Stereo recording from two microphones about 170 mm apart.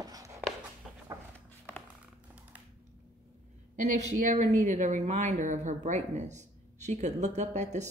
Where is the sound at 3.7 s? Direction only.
50° right (ahead or behind).